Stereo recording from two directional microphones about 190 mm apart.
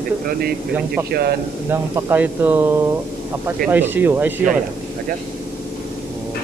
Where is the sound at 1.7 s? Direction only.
10° right (ahead or behind).